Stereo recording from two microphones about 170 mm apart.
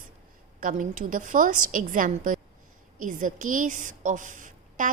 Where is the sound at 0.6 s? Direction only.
50° right (ahead or behind).